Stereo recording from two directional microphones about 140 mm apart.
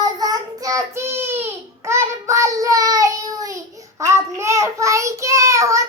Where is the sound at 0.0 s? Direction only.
30° right (ahead or behind).